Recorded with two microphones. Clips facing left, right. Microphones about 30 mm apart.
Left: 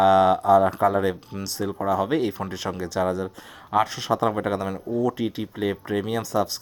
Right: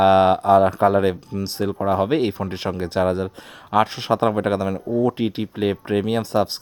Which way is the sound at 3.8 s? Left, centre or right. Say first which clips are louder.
Right 3 dB; right.